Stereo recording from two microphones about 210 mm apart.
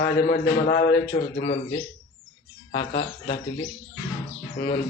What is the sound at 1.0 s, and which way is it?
Speech, 25° left (ahead or behind).